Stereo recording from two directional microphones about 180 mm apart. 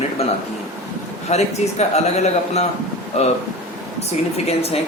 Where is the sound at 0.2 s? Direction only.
35° left (ahead or behind).